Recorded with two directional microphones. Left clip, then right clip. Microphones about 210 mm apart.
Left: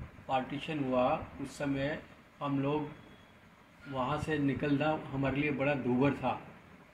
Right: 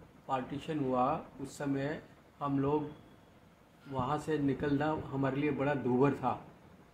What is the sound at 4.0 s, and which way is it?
A man's voice, 15° right (ahead or behind).